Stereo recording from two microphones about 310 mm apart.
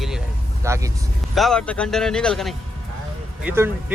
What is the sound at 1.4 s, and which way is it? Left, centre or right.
Speech, centre.